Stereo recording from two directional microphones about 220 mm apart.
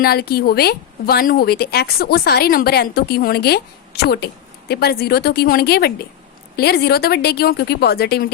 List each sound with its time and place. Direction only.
0.0 s speech: 45° left (ahead or behind)